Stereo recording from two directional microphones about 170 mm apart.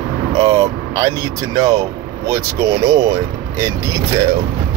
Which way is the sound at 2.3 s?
20° right (ahead or behind).